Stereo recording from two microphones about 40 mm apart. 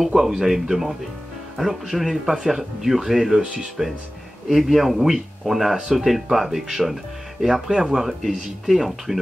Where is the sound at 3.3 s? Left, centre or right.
Centre.